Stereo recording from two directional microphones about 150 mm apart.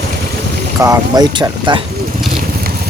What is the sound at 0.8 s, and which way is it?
Speech, 25° right (ahead or behind).